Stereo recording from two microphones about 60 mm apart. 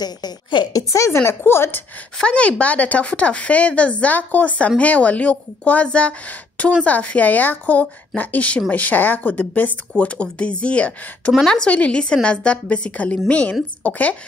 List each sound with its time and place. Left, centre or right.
0.7 s a woman's voice: left
2.2 s a woman's voice: centre